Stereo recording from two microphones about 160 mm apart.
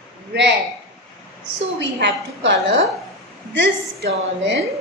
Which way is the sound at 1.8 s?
90° right.